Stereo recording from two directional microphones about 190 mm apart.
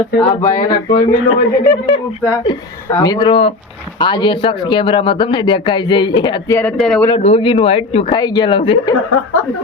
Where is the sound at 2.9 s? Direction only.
20° left (ahead or behind).